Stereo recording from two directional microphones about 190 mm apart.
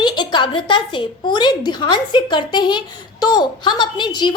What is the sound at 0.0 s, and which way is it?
A woman's voice, 25° left (ahead or behind).